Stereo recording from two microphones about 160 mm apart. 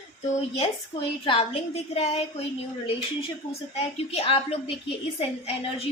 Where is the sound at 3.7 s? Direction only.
40° left (ahead or behind).